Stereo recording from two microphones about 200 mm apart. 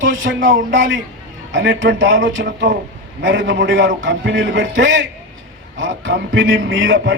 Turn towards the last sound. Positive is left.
turn(degrees=-70)  # may be behind; listen again after turning